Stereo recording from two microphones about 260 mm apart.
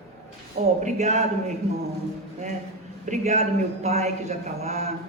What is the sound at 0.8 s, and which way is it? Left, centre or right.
Speech, right.